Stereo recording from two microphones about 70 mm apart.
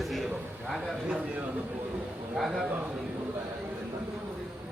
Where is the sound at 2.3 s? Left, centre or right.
Centre.